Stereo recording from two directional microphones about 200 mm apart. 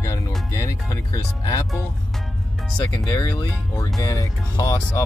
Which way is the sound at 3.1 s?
20° left (ahead or behind).